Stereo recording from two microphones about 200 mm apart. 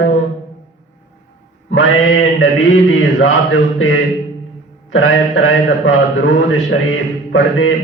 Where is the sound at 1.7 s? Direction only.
80° left.